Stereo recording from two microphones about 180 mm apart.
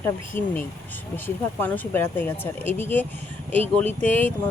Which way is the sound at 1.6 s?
10° left (ahead or behind).